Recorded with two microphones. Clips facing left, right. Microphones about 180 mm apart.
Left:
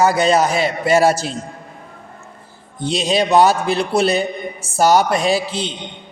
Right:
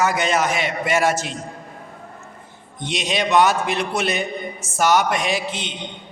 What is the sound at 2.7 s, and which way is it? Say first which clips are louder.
A man's voice: left 6 dB; 35° left (ahead or behind).